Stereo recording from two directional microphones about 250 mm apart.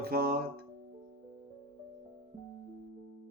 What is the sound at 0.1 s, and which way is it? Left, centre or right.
Music, right.